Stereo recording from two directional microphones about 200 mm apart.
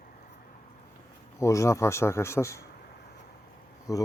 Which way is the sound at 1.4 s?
15° left (ahead or behind).